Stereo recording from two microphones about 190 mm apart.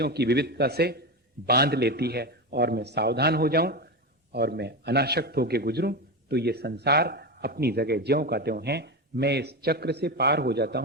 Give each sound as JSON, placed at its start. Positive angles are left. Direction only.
{"t": 0.0, "sound": "a man's voice", "side_deg": -60}